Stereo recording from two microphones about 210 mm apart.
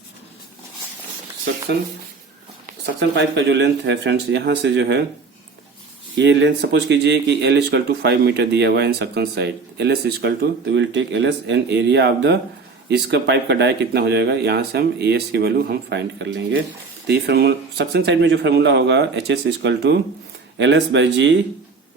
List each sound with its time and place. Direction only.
3.0 s speech: 55° right (ahead or behind)
6.1 s speech: 55° right (ahead or behind)